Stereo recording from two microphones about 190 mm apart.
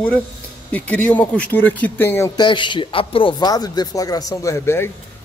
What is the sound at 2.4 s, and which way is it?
A man's voice, 25° left (ahead or behind).